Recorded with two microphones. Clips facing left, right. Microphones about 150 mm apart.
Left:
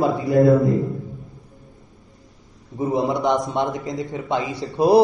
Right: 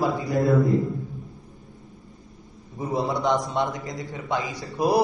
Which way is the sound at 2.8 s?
20° left (ahead or behind).